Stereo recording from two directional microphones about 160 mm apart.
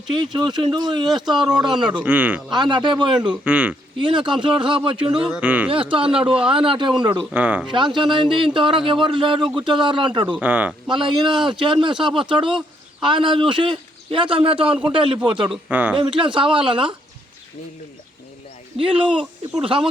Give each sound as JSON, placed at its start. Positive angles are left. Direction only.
{"t": 0.1, "sound": "speech", "side_deg": -30}
{"t": 1.0, "sound": "speech", "side_deg": 0}
{"t": 2.5, "sound": "speech", "side_deg": -30}
{"t": 3.4, "sound": "speech", "side_deg": -10}
{"t": 4.0, "sound": "speech", "side_deg": -30}
{"t": 5.1, "sound": "speech", "side_deg": -5}
{"t": 5.7, "sound": "speech", "side_deg": -35}
{"t": 7.3, "sound": "speech", "side_deg": -10}
{"t": 7.7, "sound": "speech", "side_deg": -30}
{"t": 10.4, "sound": "speech", "side_deg": -10}
{"t": 10.8, "sound": "speech", "side_deg": -30}
{"t": 15.7, "sound": "speech", "side_deg": -10}
{"t": 16.0, "sound": "speech", "side_deg": -30}
{"t": 18.8, "sound": "speech", "side_deg": -30}